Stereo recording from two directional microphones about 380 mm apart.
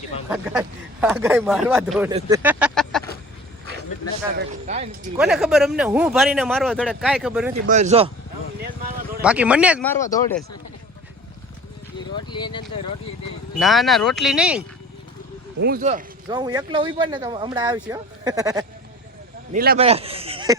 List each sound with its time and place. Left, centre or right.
0.3 s speech: centre
4.4 s speech: centre
5.1 s speech: centre
7.7 s speech: centre
9.2 s speech: centre
10.0 s speech: centre
11.9 s a sound: centre
13.6 s speech: centre
15.6 s speech: right
19.5 s a man's voice: right